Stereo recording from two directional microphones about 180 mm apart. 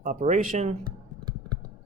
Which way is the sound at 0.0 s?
45° right (ahead or behind).